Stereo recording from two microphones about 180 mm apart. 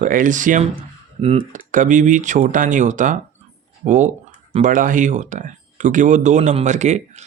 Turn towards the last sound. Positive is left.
turn(degrees=-40)  # may be behind; listen again after turning